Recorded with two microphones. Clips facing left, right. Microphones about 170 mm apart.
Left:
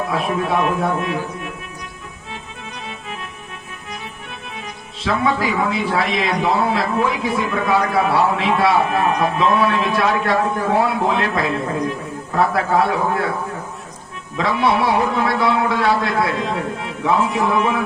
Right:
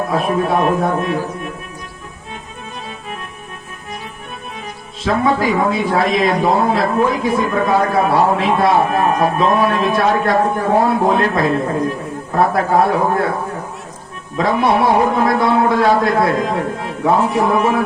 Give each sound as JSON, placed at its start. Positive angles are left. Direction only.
{"t": 0.1, "sound": "speech", "side_deg": -45}
{"t": 5.0, "sound": "a man's voice", "side_deg": -45}
{"t": 14.3, "sound": "a man's voice", "side_deg": -45}